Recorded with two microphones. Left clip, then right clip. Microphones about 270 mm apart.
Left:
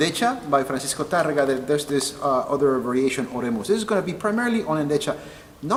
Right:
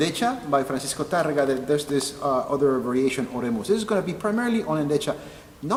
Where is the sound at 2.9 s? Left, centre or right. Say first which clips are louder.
Left 1 dB; centre.